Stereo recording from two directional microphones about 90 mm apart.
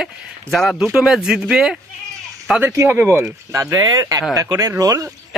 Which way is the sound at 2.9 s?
20° right (ahead or behind).